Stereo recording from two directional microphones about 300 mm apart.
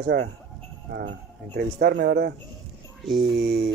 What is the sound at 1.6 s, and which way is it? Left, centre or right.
Speech, right.